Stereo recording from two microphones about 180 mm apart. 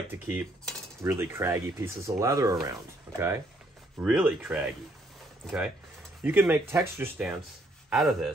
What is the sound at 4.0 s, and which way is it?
Speech, 5° right (ahead or behind).